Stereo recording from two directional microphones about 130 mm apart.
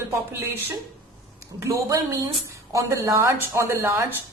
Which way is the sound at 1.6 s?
25° right (ahead or behind).